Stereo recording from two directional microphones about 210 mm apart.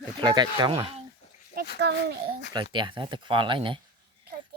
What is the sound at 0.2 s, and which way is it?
Cattle, 20° right (ahead or behind).